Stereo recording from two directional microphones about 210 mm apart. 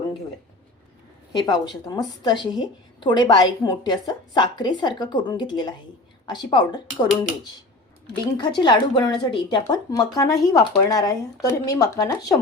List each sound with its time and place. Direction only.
1.3 s a woman's voice: 20° left (ahead or behind)
8.4 s a woman's voice: 20° left (ahead or behind)